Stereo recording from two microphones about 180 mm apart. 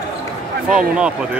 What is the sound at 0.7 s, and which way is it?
Speech, 5° right (ahead or behind).